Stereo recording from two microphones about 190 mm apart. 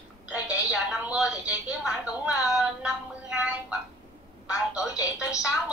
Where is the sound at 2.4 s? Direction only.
Centre (ahead or behind).